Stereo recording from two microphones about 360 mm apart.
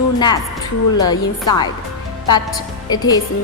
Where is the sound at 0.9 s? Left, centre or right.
Centre.